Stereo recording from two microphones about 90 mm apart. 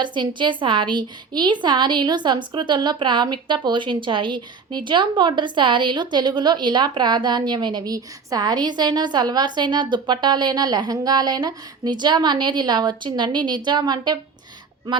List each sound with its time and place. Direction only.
0.0 s a woman's voice: 60° right (ahead or behind)